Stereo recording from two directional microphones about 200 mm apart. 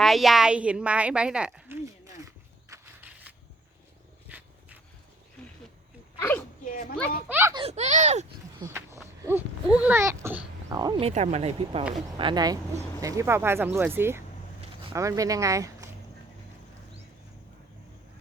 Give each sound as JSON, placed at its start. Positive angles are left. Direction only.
{"t": 0.0, "sound": "a woman's voice", "side_deg": 0}
{"t": 2.0, "sound": "walk", "side_deg": -15}
{"t": 4.3, "sound": "a sound", "side_deg": -10}
{"t": 6.1, "sound": "speech", "side_deg": 10}
{"t": 7.3, "sound": "speech", "side_deg": -10}
{"t": 7.5, "sound": "speech", "side_deg": -30}
{"t": 8.6, "sound": "speech", "side_deg": -15}